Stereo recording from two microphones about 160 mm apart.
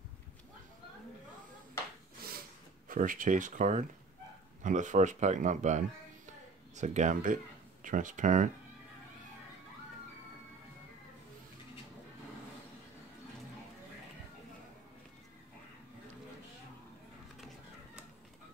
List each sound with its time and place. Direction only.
2.9 s speech: 60° right (ahead or behind)